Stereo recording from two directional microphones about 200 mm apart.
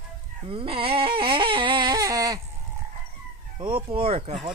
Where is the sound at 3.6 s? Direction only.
25° right (ahead or behind).